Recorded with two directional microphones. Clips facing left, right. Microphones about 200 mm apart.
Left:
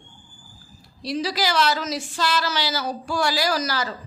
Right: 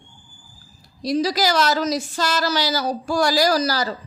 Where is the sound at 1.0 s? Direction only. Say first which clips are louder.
Right 5 dB; 40° right (ahead or behind).